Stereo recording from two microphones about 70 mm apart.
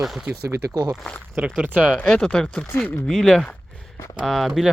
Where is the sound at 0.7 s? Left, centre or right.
Right.